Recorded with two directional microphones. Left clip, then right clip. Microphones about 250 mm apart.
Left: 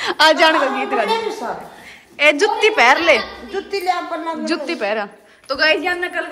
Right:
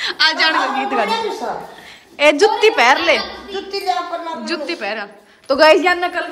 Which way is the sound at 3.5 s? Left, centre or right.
Left.